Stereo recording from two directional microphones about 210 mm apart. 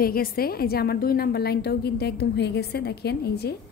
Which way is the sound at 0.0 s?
45° left (ahead or behind).